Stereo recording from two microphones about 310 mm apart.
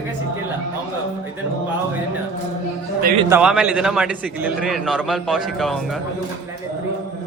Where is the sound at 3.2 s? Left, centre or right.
Centre.